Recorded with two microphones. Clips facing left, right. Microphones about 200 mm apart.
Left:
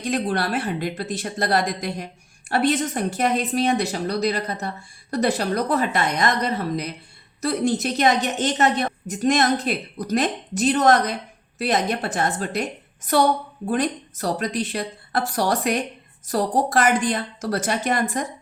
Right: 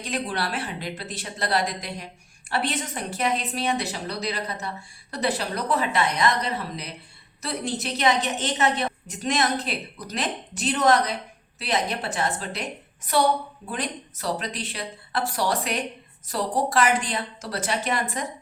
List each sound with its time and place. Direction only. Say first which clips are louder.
0.0 s a woman's voice: left 5 dB; 45° left (ahead or behind)